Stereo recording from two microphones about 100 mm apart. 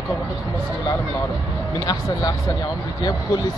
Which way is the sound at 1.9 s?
35° left (ahead or behind).